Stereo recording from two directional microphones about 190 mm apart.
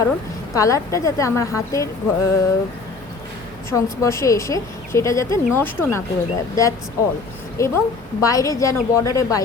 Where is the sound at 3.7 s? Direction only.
15° left (ahead or behind).